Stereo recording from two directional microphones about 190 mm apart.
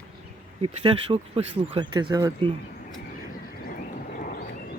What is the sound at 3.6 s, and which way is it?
Vehicle, 50° left (ahead or behind).